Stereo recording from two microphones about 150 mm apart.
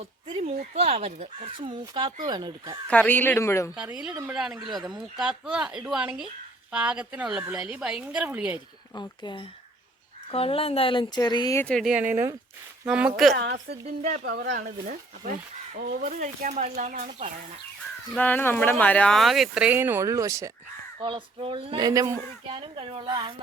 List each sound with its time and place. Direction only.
0.3 s a sound: 40° right (ahead or behind)
0.8 s speech: 45° right (ahead or behind); by 2.7 s 30° right (ahead or behind)
2.8 s speech: 10° left (ahead or behind)
3.8 s a woman's voice: 5° right (ahead or behind)
9.0 s speech: 30° left (ahead or behind)
10.3 s speech: 40° left (ahead or behind)
11.6 s a woman's voice: centre (ahead or behind)
14.1 s speech: 75° right (ahead or behind); by 17.3 s 50° right (ahead or behind)
18.1 s speech: 10° left (ahead or behind); by 20.5 s 20° right (ahead or behind)
21.0 s speech: 30° right (ahead or behind)
22.4 s speech: 35° right (ahead or behind)